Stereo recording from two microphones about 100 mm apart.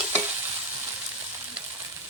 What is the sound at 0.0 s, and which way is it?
Stir, 10° right (ahead or behind).